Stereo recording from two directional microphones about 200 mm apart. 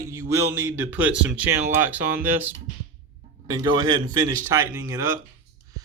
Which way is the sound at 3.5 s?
20° right (ahead or behind).